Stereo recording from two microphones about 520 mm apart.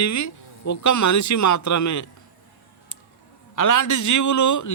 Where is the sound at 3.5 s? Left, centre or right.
Left.